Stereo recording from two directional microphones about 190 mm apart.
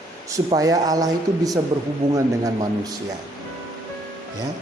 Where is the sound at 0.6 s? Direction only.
20° right (ahead or behind).